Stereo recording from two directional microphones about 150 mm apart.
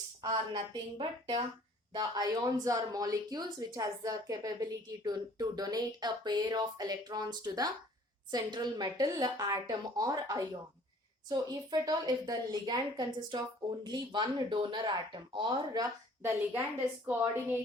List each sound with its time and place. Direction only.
0.2 s a woman's voice: 30° right (ahead or behind)